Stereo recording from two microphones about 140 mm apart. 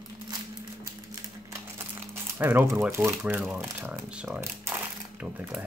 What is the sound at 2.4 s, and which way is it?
Speech, 15° right (ahead or behind).